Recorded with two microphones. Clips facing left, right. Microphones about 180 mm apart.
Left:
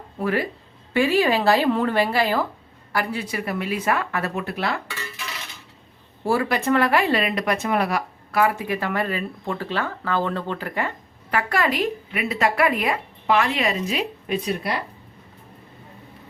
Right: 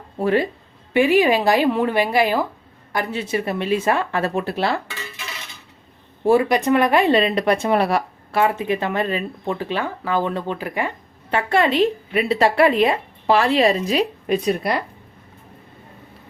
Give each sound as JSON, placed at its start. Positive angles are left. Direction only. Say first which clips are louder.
{"t": 0.2, "sound": "speech", "louder": "right 5 dB", "side_deg": -25}
{"t": 0.9, "sound": "a woman's voice", "louder": "right 4 dB", "side_deg": -15}
{"t": 6.2, "sound": "speech", "louder": "right 5 dB", "side_deg": -20}
{"t": 11.3, "sound": "speech", "louder": "right 4 dB", "side_deg": -25}